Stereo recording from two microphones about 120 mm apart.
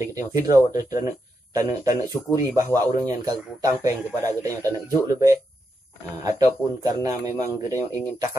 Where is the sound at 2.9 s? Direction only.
30° right (ahead or behind).